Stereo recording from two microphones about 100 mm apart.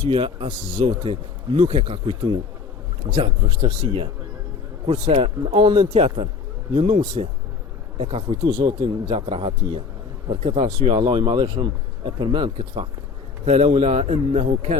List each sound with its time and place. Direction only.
0.0 s speech: 55° right (ahead or behind)
7.9 s speech: 70° right (ahead or behind)
8.4 s a man's voice: 45° right (ahead or behind)
9.0 s speech: 70° right (ahead or behind)
10.2 s speech: 80° right
10.8 s a man's voice: 55° right (ahead or behind)
12.5 s speech: 65° right (ahead or behind)
13.7 s speech: 65° right (ahead or behind); by 14.8 s 90° right